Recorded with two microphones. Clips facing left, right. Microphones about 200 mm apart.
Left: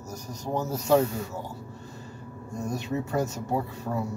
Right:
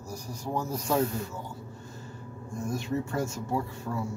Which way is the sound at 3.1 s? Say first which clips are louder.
Left 3 dB; 65° left (ahead or behind).